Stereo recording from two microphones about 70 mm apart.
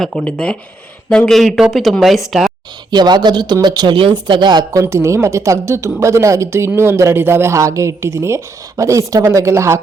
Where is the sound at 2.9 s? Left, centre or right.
Right.